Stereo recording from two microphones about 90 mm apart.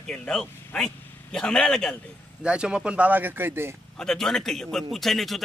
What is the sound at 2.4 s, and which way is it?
Speech, 10° right (ahead or behind).